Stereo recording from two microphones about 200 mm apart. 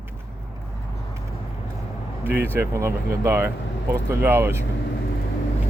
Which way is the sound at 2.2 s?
10° right (ahead or behind).